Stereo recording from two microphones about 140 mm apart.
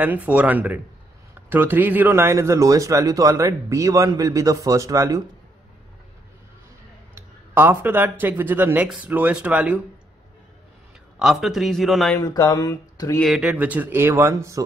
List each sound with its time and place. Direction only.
0.0 s a man's voice: 10° right (ahead or behind)
7.2 s speech: 15° right (ahead or behind)
11.1 s a man's voice: centre (ahead or behind)
12.2 s speech: 25° left (ahead or behind)
13.2 s speech: 5° right (ahead or behind); by 14.6 s 20° right (ahead or behind)